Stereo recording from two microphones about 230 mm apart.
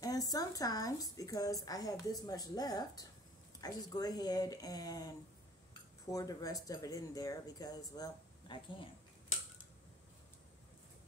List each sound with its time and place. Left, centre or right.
0.0 s a woman's voice: centre